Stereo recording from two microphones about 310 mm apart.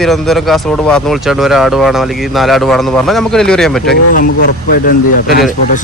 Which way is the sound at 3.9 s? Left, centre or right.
Left.